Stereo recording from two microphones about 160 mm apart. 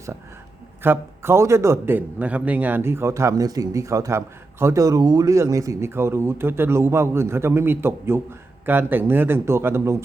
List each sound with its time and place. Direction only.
0.8 s speech: 15° right (ahead or behind)